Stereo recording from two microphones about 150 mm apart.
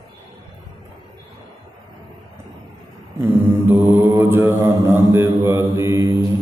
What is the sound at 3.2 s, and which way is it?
Mantra, 15° right (ahead or behind).